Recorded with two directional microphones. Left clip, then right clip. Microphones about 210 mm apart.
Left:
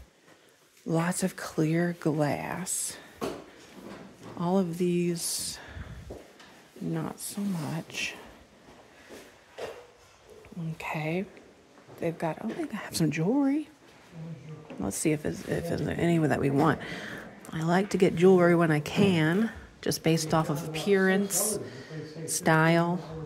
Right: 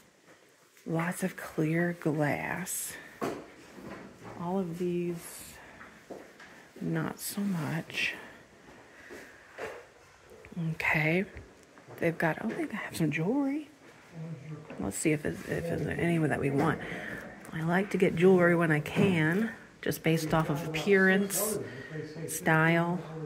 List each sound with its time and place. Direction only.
0.8 s speech: 20° left (ahead or behind)
4.4 s speech: 35° left (ahead or behind)
6.9 s speech: 5° left (ahead or behind)
10.8 s speech: centre (ahead or behind)
12.6 s speech: 15° left (ahead or behind)
14.8 s speech: 15° left (ahead or behind)